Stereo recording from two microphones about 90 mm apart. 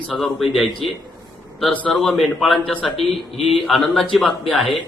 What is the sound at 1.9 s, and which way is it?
A man's voice, centre (ahead or behind).